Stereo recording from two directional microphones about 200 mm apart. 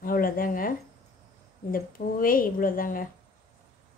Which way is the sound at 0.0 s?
45° left (ahead or behind).